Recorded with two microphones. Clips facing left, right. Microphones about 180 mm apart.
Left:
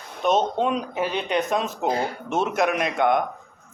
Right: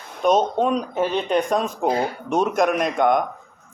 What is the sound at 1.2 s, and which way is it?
Speech, 45° right (ahead or behind).